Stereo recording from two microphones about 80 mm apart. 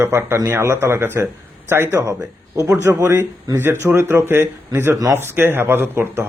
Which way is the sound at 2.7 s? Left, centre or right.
Right.